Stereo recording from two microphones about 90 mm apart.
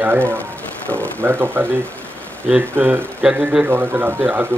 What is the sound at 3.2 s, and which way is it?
Speech, 10° right (ahead or behind).